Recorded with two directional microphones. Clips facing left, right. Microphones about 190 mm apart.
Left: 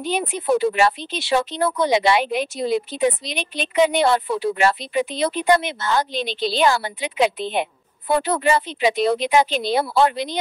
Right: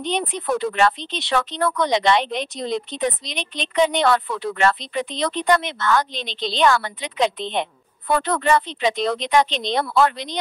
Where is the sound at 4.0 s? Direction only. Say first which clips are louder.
Left 1 dB; 25° left (ahead or behind).